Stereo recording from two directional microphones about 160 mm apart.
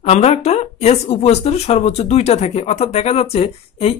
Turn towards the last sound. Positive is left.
turn(degrees=40)  # may be behind; listen again after turning